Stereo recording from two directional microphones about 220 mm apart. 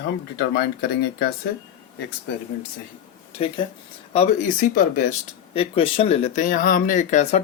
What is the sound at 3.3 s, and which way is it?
Speech, 25° left (ahead or behind).